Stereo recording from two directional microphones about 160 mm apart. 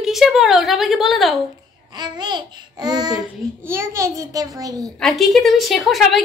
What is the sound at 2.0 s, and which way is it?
Babbling, 25° right (ahead or behind).